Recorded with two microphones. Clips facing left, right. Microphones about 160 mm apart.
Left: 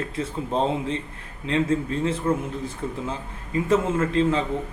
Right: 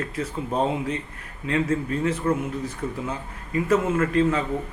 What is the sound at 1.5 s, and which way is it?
A man's voice, 25° left (ahead or behind).